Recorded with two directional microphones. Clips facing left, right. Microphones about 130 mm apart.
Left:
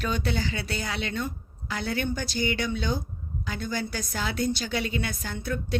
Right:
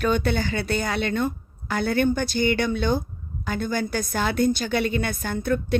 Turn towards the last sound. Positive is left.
turn(degrees=-55)  # may be behind; listen again after turning